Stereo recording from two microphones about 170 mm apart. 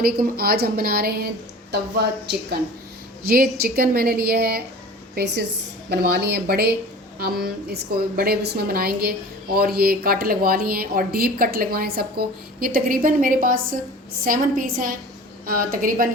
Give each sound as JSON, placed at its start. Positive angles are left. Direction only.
{"t": 0.0, "sound": "speech", "side_deg": -60}
{"t": 3.2, "sound": "speech", "side_deg": -60}
{"t": 5.1, "sound": "a woman's voice", "side_deg": -80}
{"t": 5.9, "sound": "speech", "side_deg": -70}